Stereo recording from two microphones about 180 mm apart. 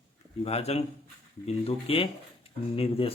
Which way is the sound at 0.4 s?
35° left (ahead or behind).